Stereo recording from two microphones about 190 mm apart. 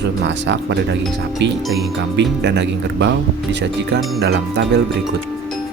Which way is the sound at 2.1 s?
65° right (ahead or behind).